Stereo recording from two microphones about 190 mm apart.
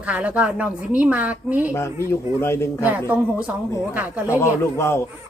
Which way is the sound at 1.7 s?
15° left (ahead or behind).